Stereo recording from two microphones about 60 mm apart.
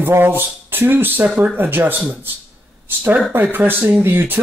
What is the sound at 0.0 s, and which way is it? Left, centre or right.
Speech, right.